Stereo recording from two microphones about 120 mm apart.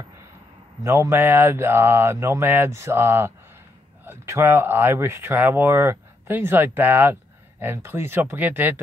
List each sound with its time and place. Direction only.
0.8 s speech: 25° right (ahead or behind)